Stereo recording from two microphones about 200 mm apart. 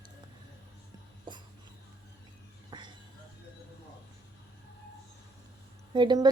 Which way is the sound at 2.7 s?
20° right (ahead or behind).